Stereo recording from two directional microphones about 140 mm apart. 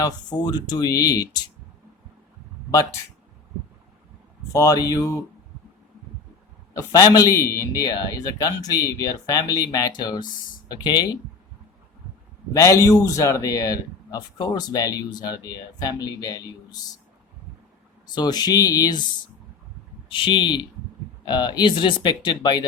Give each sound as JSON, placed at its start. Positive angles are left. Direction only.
{"t": 0.0, "sound": "a man's voice", "side_deg": 30}
{"t": 4.5, "sound": "a man's voice", "side_deg": 25}
{"t": 6.7, "sound": "a man's voice", "side_deg": 25}
{"t": 12.5, "sound": "a man's voice", "side_deg": 20}
{"t": 18.1, "sound": "a man's voice", "side_deg": 30}
{"t": 20.1, "sound": "speech", "side_deg": 35}